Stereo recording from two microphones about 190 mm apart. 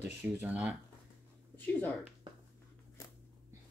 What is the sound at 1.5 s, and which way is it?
Speech, 10° left (ahead or behind).